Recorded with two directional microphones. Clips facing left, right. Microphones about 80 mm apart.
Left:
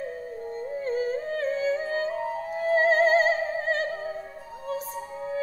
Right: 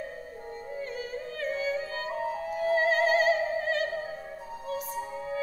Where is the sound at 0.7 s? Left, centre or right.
Left.